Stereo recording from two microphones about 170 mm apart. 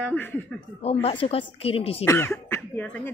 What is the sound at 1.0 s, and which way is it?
A woman's voice, 35° left (ahead or behind).